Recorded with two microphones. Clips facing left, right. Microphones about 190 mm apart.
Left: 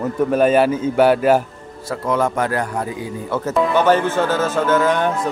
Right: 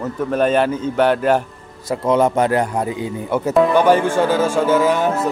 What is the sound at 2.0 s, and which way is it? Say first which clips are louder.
A man's voice: right 4 dB; 20° right (ahead or behind).